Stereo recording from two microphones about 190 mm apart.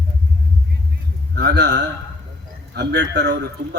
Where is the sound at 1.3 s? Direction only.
60° right (ahead or behind).